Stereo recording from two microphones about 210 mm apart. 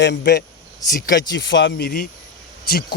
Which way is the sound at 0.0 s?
55° left (ahead or behind).